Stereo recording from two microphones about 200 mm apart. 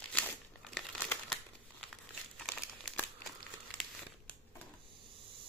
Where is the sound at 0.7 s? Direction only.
5° left (ahead or behind).